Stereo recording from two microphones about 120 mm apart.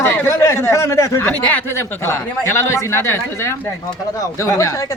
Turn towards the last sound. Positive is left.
turn(degrees=25)  # may be behind; listen again after turning